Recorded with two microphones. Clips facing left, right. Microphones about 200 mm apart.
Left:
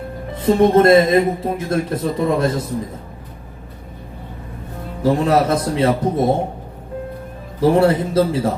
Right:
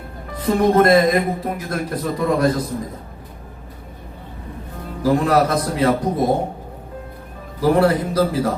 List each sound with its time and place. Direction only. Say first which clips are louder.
0.3 s speech: left 2 dB; 25° left (ahead or behind)
5.0 s speech: left 1 dB; 25° left (ahead or behind)
7.6 s speech: left 2 dB; 25° left (ahead or behind)